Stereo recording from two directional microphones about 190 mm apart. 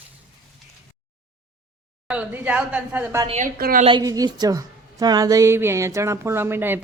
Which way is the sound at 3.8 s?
20° right (ahead or behind).